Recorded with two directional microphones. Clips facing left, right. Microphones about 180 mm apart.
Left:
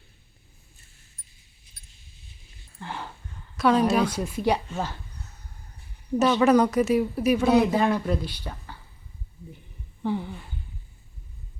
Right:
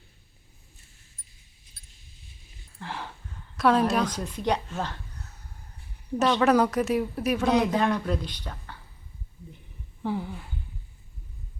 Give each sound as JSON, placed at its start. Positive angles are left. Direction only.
{"t": 2.7, "sound": "a sound", "side_deg": 0}
{"t": 3.6, "sound": "speech", "side_deg": 0}
{"t": 6.1, "sound": "speech", "side_deg": 0}
{"t": 10.0, "sound": "speech", "side_deg": -5}